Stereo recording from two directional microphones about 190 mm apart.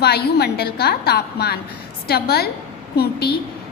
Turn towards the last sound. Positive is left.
turn(degrees=55)  # may be behind; listen again after turning